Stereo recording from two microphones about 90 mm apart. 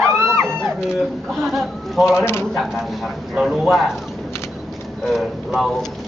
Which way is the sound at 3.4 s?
5° right (ahead or behind).